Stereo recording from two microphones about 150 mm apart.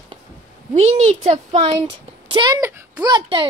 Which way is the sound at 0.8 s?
45° right (ahead or behind).